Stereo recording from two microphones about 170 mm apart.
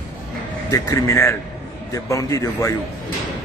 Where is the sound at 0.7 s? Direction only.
20° left (ahead or behind).